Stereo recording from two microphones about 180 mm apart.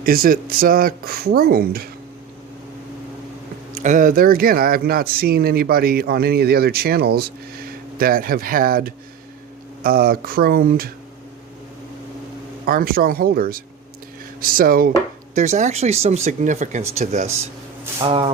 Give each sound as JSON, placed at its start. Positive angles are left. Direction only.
{"t": 0.0, "sound": "speech", "side_deg": -55}
{"t": 3.8, "sound": "speech", "side_deg": -45}
{"t": 12.6, "sound": "speech", "side_deg": -55}
{"t": 14.4, "sound": "dishes", "side_deg": -50}
{"t": 15.4, "sound": "speech", "side_deg": -40}